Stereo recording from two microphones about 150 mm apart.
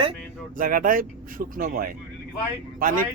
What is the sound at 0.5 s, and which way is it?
Speech, 70° right (ahead or behind).